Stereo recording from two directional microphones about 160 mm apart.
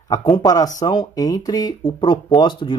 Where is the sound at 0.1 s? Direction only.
30° left (ahead or behind).